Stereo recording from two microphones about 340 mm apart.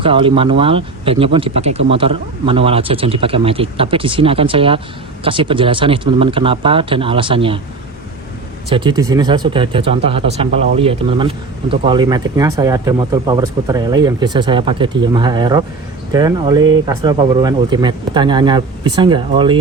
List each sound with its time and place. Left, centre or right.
0.0 s speech: centre
8.7 s speech: centre